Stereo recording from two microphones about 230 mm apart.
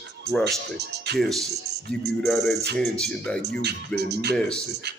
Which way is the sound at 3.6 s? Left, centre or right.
Right.